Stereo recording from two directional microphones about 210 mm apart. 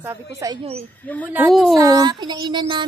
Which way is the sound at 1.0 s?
10° left (ahead or behind).